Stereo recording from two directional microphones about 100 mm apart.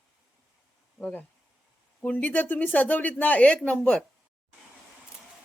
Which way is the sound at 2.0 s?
15° left (ahead or behind).